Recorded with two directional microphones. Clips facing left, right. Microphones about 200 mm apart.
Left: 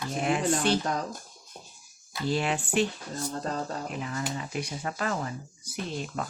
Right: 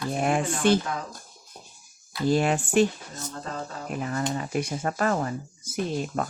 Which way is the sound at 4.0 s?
45° right (ahead or behind).